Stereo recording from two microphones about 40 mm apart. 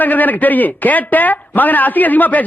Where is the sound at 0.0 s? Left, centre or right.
Left.